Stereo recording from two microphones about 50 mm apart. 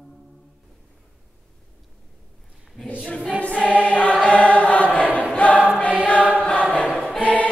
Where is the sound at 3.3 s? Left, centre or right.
Left.